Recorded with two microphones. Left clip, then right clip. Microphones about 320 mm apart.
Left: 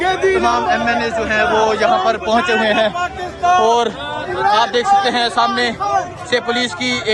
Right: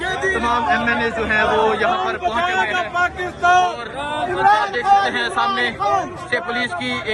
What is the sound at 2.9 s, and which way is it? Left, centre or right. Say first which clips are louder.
Speech: right 1 dB; right.